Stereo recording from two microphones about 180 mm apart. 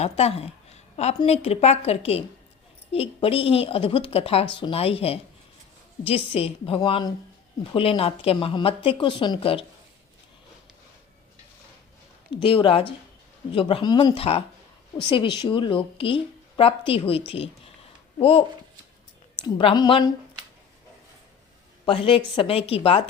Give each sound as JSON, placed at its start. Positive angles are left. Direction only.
{"t": 0.0, "sound": "a woman's voice", "side_deg": 35}
{"t": 12.3, "sound": "a woman's voice", "side_deg": 30}
{"t": 19.5, "sound": "speech", "side_deg": 25}
{"t": 21.8, "sound": "a woman's voice", "side_deg": 30}